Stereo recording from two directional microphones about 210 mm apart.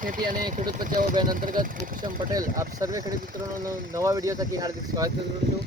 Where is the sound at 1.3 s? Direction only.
40° right (ahead or behind).